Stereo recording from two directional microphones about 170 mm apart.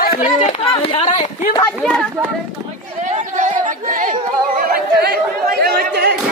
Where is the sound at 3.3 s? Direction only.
45° right (ahead or behind).